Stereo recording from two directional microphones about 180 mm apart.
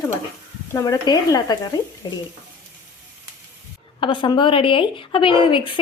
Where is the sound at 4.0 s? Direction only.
25° left (ahead or behind).